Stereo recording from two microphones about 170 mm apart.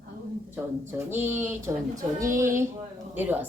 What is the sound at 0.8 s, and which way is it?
A woman's voice, 15° right (ahead or behind).